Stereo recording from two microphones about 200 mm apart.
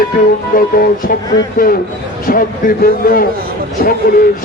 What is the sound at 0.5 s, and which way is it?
A man's voice, 45° left (ahead or behind).